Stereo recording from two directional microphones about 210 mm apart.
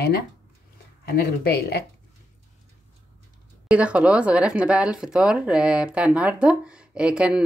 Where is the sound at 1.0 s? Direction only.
50° left (ahead or behind).